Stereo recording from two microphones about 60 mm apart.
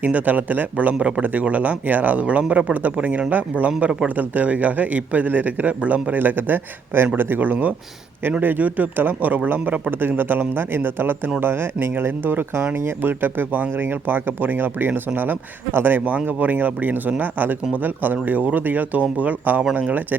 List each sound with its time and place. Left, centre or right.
0.0 s a man's voice: right
0.9 s a man's voice: centre
3.7 s a man's voice: centre